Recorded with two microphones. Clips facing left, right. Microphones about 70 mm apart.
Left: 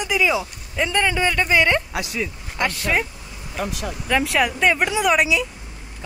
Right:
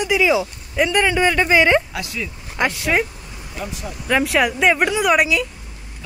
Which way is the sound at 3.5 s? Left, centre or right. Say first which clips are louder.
Left 3 dB; left.